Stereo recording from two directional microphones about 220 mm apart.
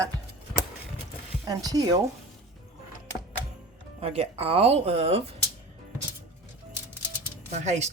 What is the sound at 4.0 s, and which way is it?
Speech, 25° right (ahead or behind).